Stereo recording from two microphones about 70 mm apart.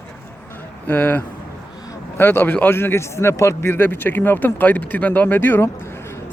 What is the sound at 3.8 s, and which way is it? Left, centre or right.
Speech, left.